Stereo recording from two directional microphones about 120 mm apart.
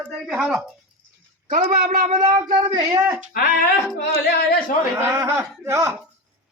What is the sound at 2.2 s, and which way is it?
Speech, 35° right (ahead or behind).